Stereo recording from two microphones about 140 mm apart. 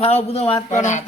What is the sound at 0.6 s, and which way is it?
Speech, 60° left (ahead or behind).